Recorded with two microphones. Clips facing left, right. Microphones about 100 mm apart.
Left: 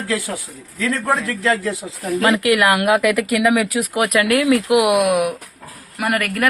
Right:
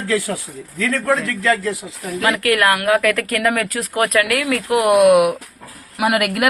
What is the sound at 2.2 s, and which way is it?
Speech, 20° left (ahead or behind).